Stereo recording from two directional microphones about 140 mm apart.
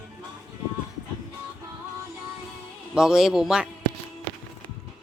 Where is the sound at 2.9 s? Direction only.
5° right (ahead or behind).